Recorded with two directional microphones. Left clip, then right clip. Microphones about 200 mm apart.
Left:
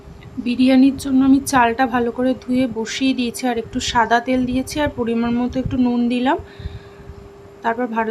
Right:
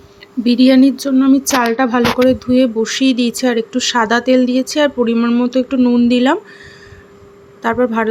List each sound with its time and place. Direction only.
0.4 s speech: 20° right (ahead or behind)
7.6 s speech: 20° right (ahead or behind)